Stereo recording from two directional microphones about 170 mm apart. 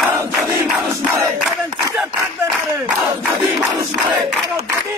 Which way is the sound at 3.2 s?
10° right (ahead or behind).